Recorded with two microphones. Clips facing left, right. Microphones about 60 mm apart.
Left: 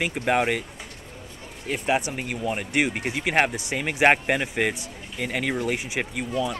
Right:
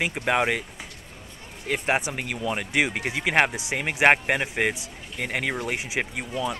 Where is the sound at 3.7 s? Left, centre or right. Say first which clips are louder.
Even; right.